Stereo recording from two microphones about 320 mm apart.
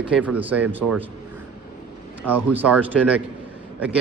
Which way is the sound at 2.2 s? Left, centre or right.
Centre.